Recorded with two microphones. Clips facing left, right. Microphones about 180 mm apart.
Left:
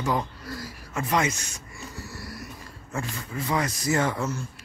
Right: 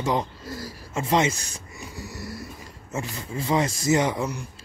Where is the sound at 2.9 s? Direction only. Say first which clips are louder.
Right 1 dB; 25° right (ahead or behind).